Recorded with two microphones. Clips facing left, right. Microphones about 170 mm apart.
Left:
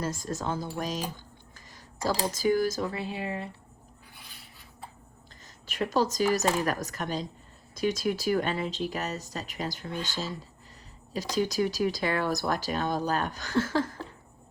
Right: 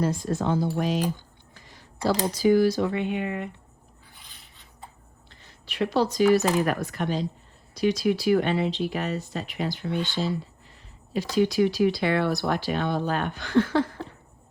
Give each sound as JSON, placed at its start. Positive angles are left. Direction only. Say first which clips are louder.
{"t": 0.1, "sound": "speech", "louder": "right 6 dB", "side_deg": 40}
{"t": 2.9, "sound": "speech", "louder": "right 6 dB", "side_deg": 35}
{"t": 5.6, "sound": "speech", "louder": "right 3 dB", "side_deg": 45}
{"t": 11.1, "sound": "speech", "louder": "right 5 dB", "side_deg": 40}